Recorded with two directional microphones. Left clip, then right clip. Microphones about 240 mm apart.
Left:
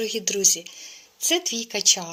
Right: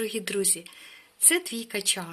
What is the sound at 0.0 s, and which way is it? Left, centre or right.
A woman's voice, centre.